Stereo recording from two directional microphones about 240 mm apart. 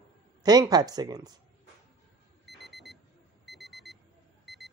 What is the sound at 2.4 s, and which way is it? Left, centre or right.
Alarm clock, centre.